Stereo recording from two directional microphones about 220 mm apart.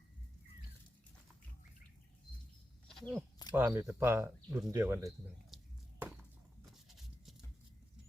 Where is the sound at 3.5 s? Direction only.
10° right (ahead or behind).